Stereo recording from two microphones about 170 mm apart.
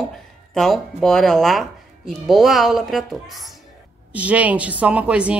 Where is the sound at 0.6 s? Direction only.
Centre (ahead or behind).